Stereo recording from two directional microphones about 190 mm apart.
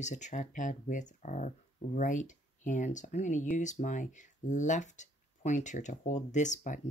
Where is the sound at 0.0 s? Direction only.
40° left (ahead or behind).